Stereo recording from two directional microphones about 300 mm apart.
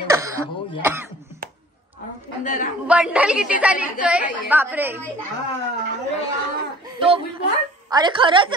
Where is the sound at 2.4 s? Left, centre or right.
Left.